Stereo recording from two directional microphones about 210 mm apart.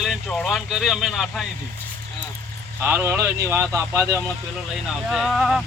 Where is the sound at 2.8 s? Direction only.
10° right (ahead or behind).